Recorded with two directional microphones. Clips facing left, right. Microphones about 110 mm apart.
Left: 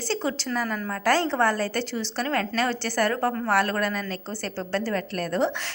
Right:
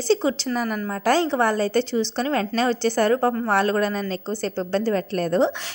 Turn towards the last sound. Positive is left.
turn(degrees=-25)  # may be behind; listen again after turning